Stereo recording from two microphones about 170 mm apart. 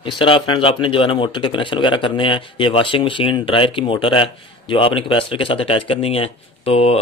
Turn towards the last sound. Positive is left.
turn(degrees=35)  # may be behind; listen again after turning